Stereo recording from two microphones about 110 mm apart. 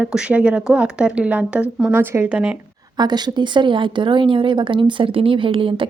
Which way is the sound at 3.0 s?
40° right (ahead or behind).